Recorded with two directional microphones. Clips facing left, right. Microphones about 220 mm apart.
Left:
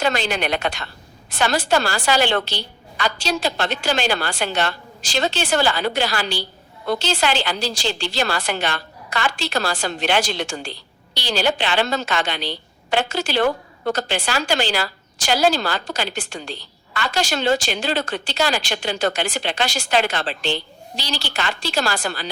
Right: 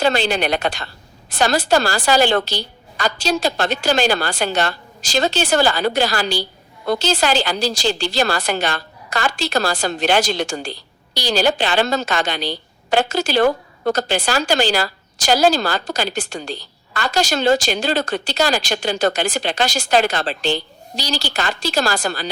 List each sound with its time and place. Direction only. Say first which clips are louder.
0.0 s a woman's voice: right 4 dB; 30° right (ahead or behind)